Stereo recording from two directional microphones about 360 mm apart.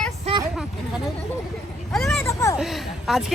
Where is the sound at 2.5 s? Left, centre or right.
Centre.